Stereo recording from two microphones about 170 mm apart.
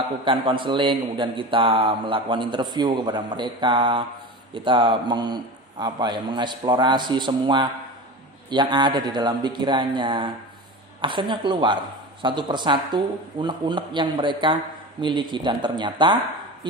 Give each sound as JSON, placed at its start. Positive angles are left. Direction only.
{"t": 0.2, "sound": "speech", "side_deg": -30}